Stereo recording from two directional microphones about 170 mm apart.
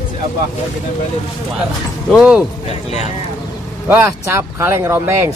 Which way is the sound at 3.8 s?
10° right (ahead or behind).